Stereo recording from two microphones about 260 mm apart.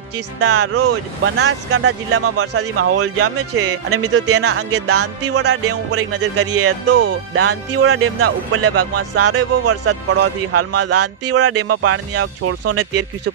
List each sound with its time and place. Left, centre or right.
0.4 s speech: right
5.4 s speech: right